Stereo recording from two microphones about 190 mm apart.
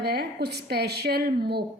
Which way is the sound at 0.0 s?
60° right (ahead or behind).